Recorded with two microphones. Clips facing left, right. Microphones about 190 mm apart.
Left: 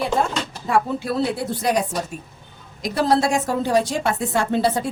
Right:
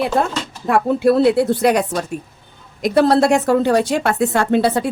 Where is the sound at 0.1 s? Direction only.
60° right (ahead or behind).